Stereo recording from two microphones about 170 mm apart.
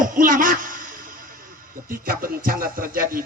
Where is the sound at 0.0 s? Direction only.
50° right (ahead or behind).